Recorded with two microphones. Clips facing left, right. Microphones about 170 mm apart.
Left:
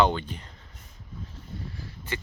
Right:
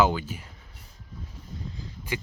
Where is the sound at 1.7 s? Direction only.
15° right (ahead or behind).